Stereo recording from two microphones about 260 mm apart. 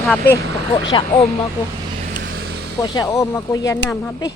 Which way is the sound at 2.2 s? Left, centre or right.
Right.